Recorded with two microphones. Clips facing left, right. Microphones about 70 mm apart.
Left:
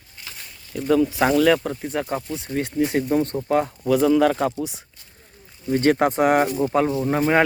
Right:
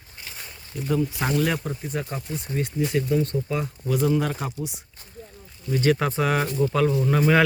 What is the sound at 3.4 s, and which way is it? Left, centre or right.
Speech, left.